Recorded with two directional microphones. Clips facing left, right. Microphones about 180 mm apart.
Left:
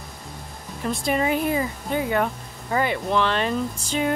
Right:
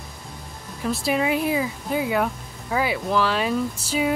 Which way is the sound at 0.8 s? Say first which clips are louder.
Even; centre (ahead or behind).